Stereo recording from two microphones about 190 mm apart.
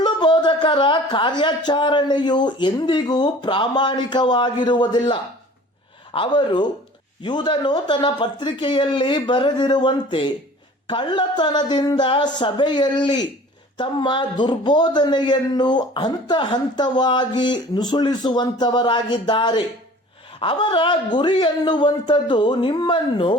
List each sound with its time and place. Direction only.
0.0 s a man's voice: 25° left (ahead or behind)